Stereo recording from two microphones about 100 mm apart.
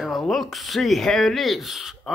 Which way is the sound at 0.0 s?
Centre (ahead or behind).